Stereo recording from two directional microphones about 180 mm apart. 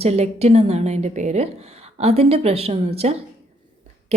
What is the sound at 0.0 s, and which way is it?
A woman's voice, 35° right (ahead or behind).